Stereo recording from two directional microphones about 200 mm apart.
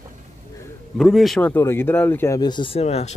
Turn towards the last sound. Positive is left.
turn(degrees=30)  # may be behind; listen again after turning